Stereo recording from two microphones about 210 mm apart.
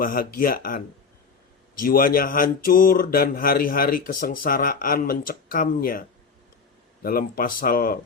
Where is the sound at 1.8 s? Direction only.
45° left (ahead or behind).